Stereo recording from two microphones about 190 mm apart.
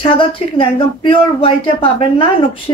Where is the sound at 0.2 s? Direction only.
25° left (ahead or behind).